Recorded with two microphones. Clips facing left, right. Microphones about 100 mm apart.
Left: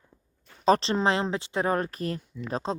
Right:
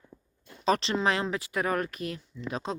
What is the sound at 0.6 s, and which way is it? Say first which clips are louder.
Speech: left 4 dB; 35° left (ahead or behind).